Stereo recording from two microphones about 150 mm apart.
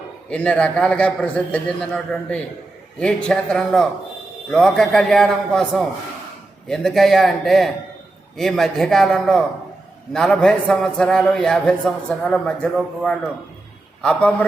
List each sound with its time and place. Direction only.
0.3 s a man's voice: 10° left (ahead or behind)